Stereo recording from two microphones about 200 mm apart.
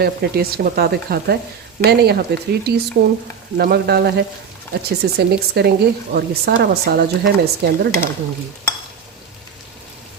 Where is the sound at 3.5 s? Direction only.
50° right (ahead or behind).